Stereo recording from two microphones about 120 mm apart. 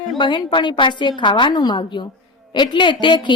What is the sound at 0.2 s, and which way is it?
A woman's voice, 40° left (ahead or behind).